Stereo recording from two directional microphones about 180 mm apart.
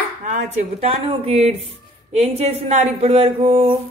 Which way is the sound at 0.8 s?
35° right (ahead or behind).